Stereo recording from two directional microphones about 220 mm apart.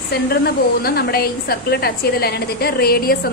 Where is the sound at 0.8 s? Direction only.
45° left (ahead or behind).